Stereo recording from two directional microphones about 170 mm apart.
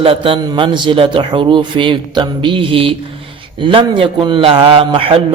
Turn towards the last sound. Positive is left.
turn(degrees=-30)  # may be behind; listen again after turning